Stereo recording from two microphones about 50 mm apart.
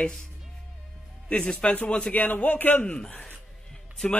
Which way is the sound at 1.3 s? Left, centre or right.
Left.